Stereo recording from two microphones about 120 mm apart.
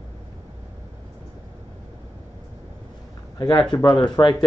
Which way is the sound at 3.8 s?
35° left (ahead or behind).